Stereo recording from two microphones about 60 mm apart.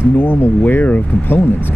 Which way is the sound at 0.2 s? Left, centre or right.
Left.